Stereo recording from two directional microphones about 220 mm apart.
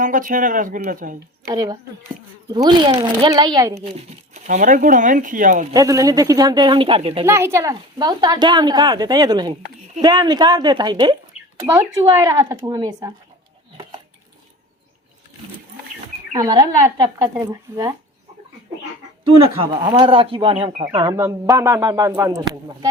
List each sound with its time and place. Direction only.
0.0 s speech: 35° right (ahead or behind)
1.5 s a woman's voice: 15° right (ahead or behind)
4.4 s speech: 35° right (ahead or behind)
5.7 s a woman's voice: 15° right (ahead or behind)
7.3 s a woman's voice: 10° right (ahead or behind)
12.2 s a woman's voice: 15° right (ahead or behind)
16.4 s a woman's voice: 15° right (ahead or behind)
19.2 s a woman's voice: 25° right (ahead or behind)